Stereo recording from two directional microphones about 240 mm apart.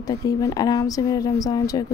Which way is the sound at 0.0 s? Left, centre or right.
Centre.